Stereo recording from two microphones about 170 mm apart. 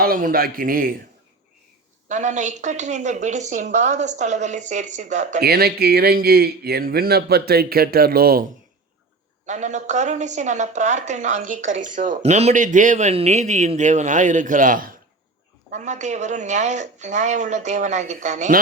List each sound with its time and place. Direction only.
0.0 s speech: 55° right (ahead or behind)
2.0 s a woman's voice: 45° right (ahead or behind)
5.4 s speech: 70° right (ahead or behind)
9.5 s a woman's voice: 45° right (ahead or behind)